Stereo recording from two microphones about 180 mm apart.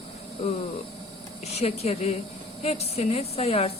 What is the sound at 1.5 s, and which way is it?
Speech, 35° left (ahead or behind).